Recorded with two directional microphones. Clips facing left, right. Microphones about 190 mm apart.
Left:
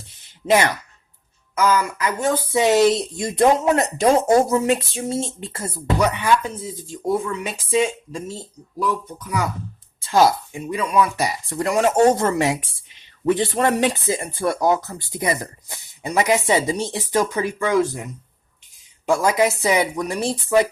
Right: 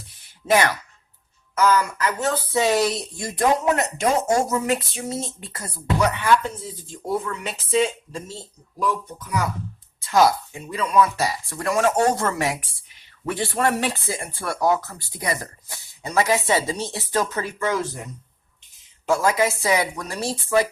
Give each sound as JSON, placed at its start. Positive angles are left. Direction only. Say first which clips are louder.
{"t": 0.4, "sound": "speech", "louder": "left 2 dB", "side_deg": 25}
{"t": 1.5, "sound": "speech", "louder": "even", "side_deg": 10}
{"t": 3.8, "sound": "speech", "louder": "left 5 dB", "side_deg": 35}
{"t": 7.4, "sound": "speech", "louder": "left 1 dB", "side_deg": 10}
{"t": 10.0, "sound": "speech", "louder": "left 1 dB", "side_deg": 30}
{"t": 19.0, "sound": "speech", "louder": "left 2 dB", "side_deg": 15}